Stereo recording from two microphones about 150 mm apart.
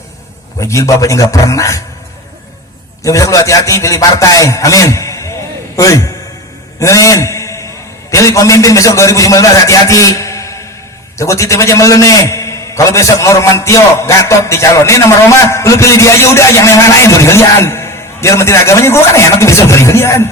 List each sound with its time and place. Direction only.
0.6 s a man's voice: 20° left (ahead or behind)
3.0 s a man's voice: 20° left (ahead or behind)
6.7 s a sound: 20° left (ahead or behind)
8.1 s a man's voice: 20° left (ahead or behind)